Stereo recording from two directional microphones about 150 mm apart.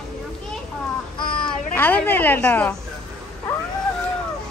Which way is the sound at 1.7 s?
10° left (ahead or behind).